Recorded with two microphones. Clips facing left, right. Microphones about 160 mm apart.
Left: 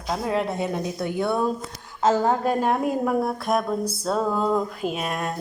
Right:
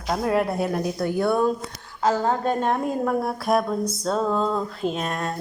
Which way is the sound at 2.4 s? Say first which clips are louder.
Left 1 dB; 5° left (ahead or behind).